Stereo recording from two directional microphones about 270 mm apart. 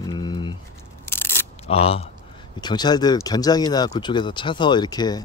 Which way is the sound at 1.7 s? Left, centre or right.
Left.